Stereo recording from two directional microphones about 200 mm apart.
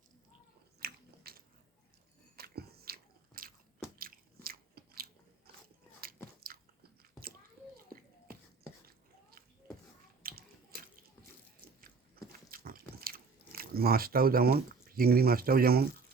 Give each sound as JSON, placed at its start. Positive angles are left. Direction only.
{"t": 0.8, "sound": "biting", "side_deg": -50}
{"t": 5.6, "sound": "a sound", "side_deg": -50}
{"t": 6.5, "sound": "biting", "side_deg": -45}
{"t": 9.3, "sound": "a sound", "side_deg": -50}
{"t": 10.2, "sound": "water", "side_deg": -45}
{"t": 11.8, "sound": "biting", "side_deg": -45}